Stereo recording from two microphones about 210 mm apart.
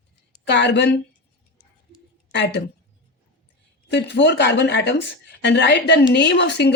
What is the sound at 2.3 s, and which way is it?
Speech, 55° left (ahead or behind).